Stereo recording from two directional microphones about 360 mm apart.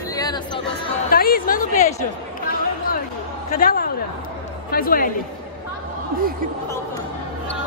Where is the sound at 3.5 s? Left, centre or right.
Left.